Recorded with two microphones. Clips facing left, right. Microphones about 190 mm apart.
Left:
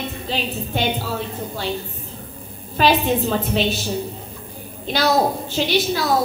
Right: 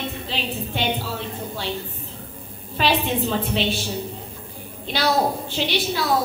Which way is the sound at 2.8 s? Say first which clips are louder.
Left 4 dB; 40° left (ahead or behind).